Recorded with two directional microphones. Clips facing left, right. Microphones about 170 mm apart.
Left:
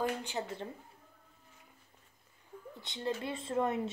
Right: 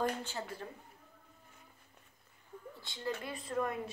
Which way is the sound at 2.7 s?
20° left (ahead or behind).